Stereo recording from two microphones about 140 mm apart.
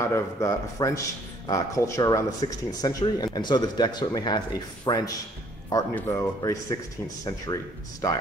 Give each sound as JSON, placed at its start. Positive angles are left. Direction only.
{"t": 0.0, "sound": "speech", "side_deg": 20}